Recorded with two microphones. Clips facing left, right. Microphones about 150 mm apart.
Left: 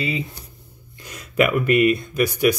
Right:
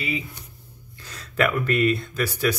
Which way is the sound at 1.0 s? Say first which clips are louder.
Left 4 dB; 15° left (ahead or behind).